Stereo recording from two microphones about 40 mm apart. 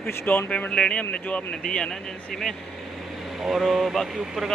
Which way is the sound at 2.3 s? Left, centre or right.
Centre.